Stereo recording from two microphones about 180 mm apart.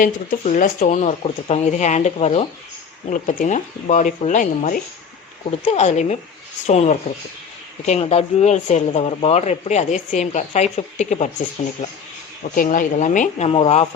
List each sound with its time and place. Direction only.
0.0 s speech: 45° left (ahead or behind)
3.1 s speech: 45° left (ahead or behind)
12.5 s speech: 45° left (ahead or behind)